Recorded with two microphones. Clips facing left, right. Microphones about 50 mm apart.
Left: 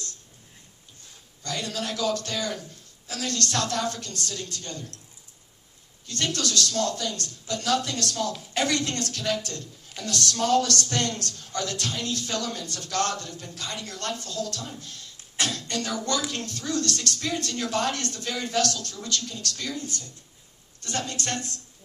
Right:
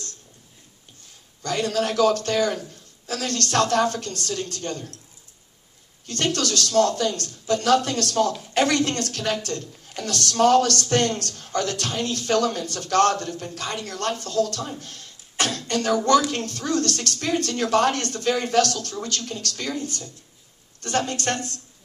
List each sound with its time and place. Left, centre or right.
1.4 s speech: right
6.0 s speech: right